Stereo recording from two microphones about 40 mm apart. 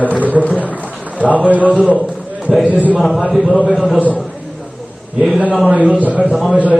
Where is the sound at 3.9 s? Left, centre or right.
Right.